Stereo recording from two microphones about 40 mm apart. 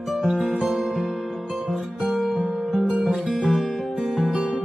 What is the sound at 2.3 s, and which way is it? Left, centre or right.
Music, centre.